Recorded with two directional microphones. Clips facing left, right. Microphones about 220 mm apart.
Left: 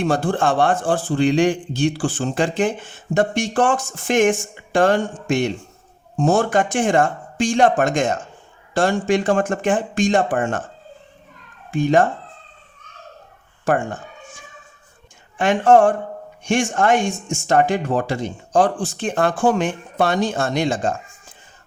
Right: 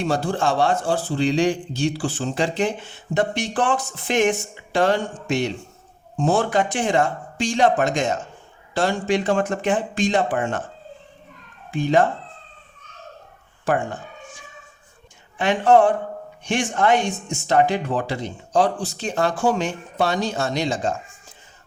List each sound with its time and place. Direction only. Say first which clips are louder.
0.0 s a man's voice: left 3 dB; 50° left (ahead or behind)
11.7 s a man's voice: left 2 dB; 45° left (ahead or behind)
13.7 s a man's voice: left 2 dB; 45° left (ahead or behind)
15.4 s a man's voice: left 2 dB; 50° left (ahead or behind)